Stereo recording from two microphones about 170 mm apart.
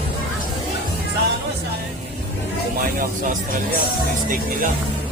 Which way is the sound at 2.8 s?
50° right (ahead or behind).